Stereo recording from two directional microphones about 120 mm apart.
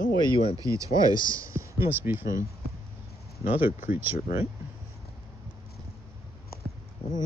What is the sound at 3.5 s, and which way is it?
Speech, 20° right (ahead or behind).